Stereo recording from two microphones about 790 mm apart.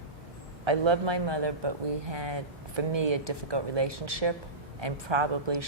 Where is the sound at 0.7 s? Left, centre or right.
Right.